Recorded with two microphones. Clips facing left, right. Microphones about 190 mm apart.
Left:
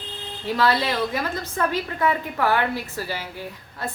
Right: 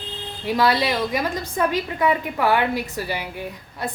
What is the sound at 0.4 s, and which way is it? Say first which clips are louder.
A woman's voice: right 2 dB; 15° right (ahead or behind).